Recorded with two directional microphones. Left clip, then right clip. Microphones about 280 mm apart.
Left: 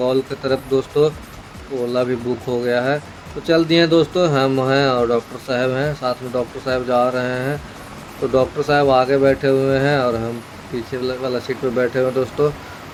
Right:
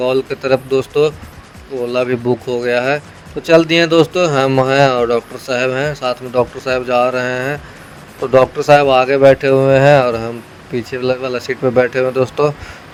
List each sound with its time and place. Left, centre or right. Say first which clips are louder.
0.0 s speech: right 3 dB; right